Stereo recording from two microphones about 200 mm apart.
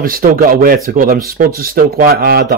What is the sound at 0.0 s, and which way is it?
Speech, 45° right (ahead or behind).